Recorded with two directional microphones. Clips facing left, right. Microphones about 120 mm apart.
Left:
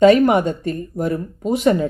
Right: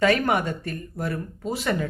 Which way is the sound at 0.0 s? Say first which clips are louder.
Left 9 dB; 20° left (ahead or behind).